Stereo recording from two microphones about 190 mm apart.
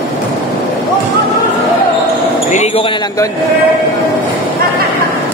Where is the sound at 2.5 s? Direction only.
35° left (ahead or behind).